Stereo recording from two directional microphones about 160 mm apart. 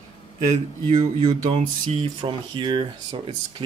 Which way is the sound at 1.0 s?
40° right (ahead or behind).